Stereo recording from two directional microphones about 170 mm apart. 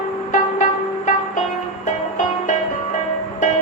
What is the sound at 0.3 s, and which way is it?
Music, 45° left (ahead or behind).